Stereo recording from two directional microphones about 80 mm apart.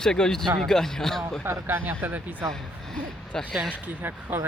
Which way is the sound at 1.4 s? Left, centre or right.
Right.